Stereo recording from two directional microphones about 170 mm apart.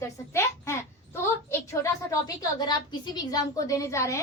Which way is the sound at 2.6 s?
25° left (ahead or behind).